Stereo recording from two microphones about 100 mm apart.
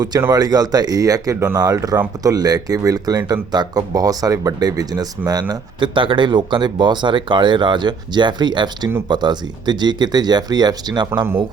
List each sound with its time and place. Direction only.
0.3 s speech: 40° right (ahead or behind)
5.9 s speech: 55° right (ahead or behind)